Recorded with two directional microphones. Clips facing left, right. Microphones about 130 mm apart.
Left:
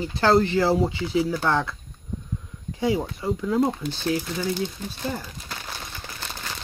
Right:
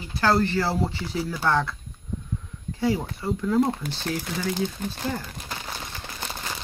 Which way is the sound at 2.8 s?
15° left (ahead or behind).